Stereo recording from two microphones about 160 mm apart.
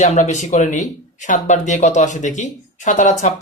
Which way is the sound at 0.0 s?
45° left (ahead or behind).